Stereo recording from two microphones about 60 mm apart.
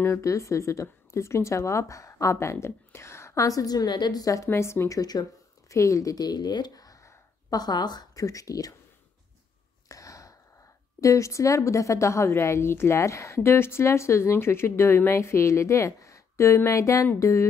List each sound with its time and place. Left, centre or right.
0.0 s a woman's voice: left
3.4 s a woman's voice: left
4.5 s a woman's voice: left
4.8 s a woman's voice: left
5.7 s a woman's voice: left
6.7 s a sound: left
7.5 s a woman's voice: left
9.8 s a sound: left
11.0 s a woman's voice: left